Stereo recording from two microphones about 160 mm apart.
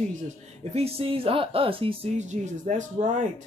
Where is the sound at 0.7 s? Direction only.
40° right (ahead or behind).